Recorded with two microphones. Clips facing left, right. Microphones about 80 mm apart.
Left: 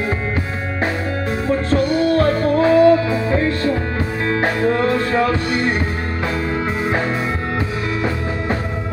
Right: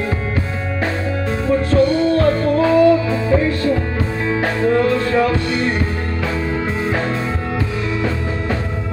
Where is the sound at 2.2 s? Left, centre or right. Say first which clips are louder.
Even; left.